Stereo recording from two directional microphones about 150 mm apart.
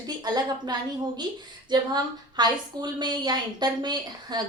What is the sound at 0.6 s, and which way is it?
A woman's voice, 30° right (ahead or behind).